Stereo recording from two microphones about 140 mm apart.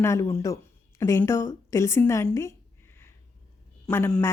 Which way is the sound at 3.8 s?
15° left (ahead or behind).